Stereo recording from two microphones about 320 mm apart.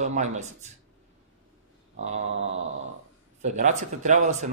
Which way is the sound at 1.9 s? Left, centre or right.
Right.